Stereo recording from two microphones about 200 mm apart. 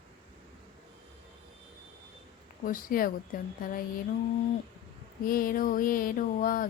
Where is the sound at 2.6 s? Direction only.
45° left (ahead or behind).